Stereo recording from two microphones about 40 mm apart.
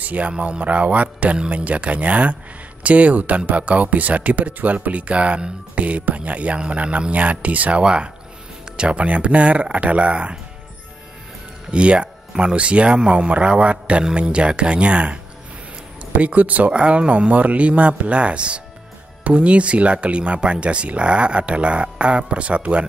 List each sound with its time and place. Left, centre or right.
0.0 s speech: right
7.8 s speech: right
11.7 s speech: right
16.7 s speech: right